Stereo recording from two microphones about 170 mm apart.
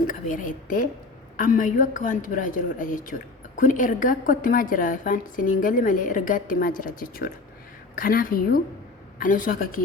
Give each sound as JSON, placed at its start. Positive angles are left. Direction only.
{"t": 0.1, "sound": "a woman's voice", "side_deg": 50}